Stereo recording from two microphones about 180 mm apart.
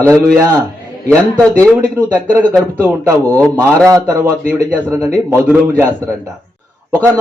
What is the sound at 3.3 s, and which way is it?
Speech, 5° left (ahead or behind).